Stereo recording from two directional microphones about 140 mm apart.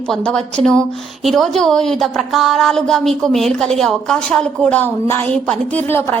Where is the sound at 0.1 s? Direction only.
5° left (ahead or behind).